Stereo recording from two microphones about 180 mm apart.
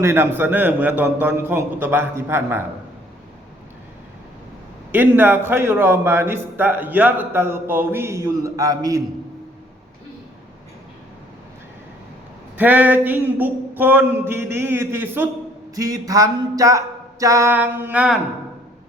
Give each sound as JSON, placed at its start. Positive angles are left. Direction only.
{"t": 0.0, "sound": "a man's voice", "side_deg": -15}
{"t": 4.9, "sound": "a man's voice", "side_deg": -10}
{"t": 12.5, "sound": "a man's voice", "side_deg": -10}